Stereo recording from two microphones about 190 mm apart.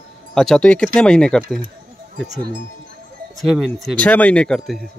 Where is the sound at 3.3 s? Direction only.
Centre (ahead or behind).